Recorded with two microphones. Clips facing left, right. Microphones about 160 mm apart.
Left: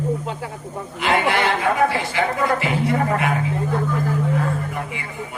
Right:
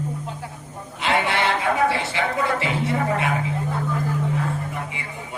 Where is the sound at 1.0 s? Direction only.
25° right (ahead or behind).